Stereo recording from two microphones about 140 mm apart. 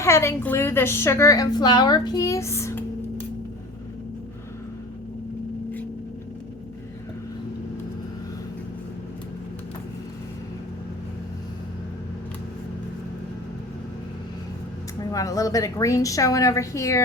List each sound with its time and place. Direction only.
0.0 s a woman's voice: 20° left (ahead or behind)
15.1 s a woman's voice: 25° left (ahead or behind)